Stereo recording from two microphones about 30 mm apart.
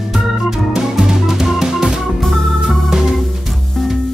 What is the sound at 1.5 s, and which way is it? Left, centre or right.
Music, centre.